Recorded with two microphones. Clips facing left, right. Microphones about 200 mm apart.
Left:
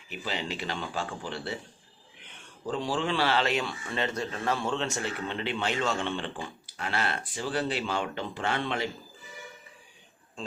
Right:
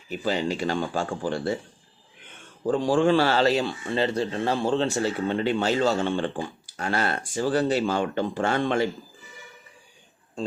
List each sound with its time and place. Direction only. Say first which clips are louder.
0.1 s speech: right 8 dB; 40° right (ahead or behind)
2.6 s speech: right 9 dB; 50° right (ahead or behind)